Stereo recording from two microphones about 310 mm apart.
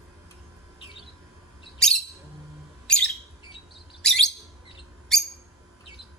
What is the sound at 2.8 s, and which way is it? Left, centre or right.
Bird, centre.